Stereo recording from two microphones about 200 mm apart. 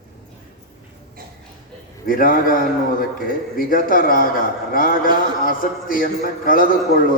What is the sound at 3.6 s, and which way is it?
A man's voice, 45° left (ahead or behind).